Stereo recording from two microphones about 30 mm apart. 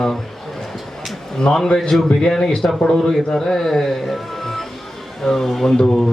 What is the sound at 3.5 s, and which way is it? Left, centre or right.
A man's voice, centre.